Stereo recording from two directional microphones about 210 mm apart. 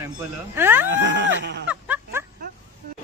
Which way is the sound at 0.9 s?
60° right (ahead or behind).